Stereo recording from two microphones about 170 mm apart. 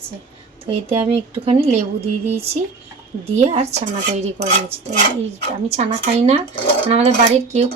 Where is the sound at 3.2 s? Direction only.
40° right (ahead or behind).